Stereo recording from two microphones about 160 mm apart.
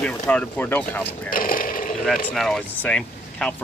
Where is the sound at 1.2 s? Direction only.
60° left (ahead or behind).